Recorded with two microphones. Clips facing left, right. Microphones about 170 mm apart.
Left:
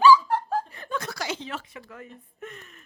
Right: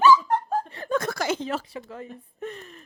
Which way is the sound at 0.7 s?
40° right (ahead or behind).